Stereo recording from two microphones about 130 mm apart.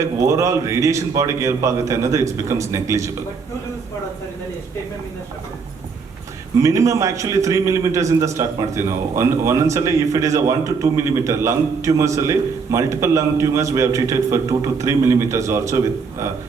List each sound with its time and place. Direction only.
0.0 s a man's voice: 25° right (ahead or behind)
6.6 s a man's voice: 25° right (ahead or behind)